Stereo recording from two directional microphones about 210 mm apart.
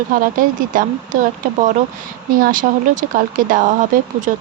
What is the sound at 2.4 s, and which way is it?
Speech, 40° right (ahead or behind).